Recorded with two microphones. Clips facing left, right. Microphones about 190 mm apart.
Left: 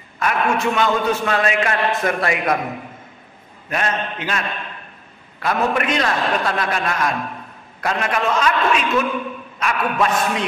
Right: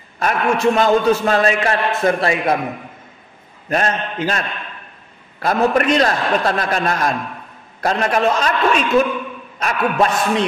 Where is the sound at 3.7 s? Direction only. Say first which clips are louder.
Right 3 dB; 40° right (ahead or behind).